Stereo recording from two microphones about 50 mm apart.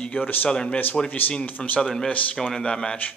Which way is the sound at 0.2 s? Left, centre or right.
Left.